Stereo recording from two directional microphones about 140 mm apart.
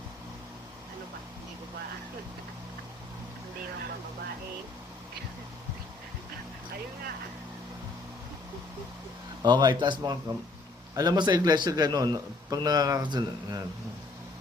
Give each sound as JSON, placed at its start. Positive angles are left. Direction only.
{"t": 9.4, "sound": "a man's voice", "side_deg": -30}